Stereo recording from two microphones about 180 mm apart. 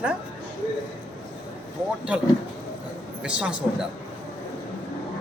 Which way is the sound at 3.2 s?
5° right (ahead or behind).